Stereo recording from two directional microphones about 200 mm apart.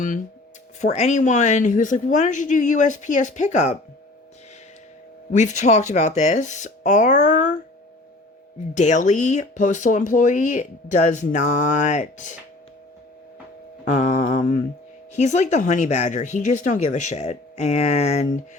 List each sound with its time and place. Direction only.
0.8 s speech: 35° left (ahead or behind)
5.3 s speech: 35° left (ahead or behind)
8.7 s speech: 35° left (ahead or behind)
13.8 s speech: 40° left (ahead or behind)